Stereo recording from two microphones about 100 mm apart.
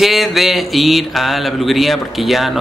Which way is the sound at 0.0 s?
Centre (ahead or behind).